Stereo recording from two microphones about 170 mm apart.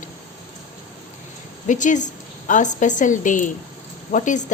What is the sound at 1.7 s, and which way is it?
A woman's voice, 45° left (ahead or behind).